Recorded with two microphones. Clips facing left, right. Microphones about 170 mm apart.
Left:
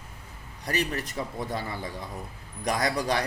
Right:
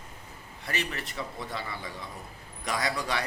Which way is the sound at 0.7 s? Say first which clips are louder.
Left 5 dB; 45° left (ahead or behind).